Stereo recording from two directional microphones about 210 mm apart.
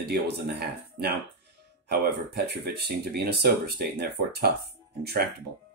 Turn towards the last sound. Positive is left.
turn(degrees=-50)  # may be behind; listen again after turning